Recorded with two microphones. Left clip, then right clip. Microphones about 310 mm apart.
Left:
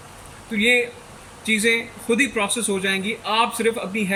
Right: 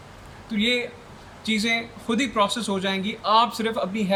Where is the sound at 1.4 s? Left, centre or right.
Centre.